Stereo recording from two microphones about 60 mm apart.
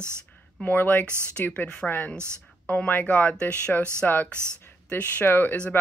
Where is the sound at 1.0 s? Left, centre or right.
Right.